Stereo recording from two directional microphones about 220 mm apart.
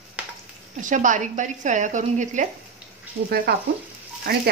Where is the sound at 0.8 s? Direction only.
35° right (ahead or behind).